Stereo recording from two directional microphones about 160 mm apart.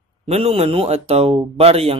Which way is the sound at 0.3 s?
40° right (ahead or behind).